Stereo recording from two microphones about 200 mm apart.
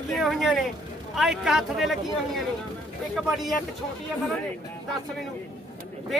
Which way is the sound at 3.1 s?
Centre (ahead or behind).